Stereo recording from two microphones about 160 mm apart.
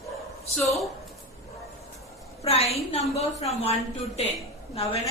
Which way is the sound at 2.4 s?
40° left (ahead or behind).